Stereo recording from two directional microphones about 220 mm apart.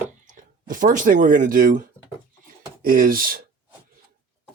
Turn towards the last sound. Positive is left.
turn(degrees=-40)  # may be behind; listen again after turning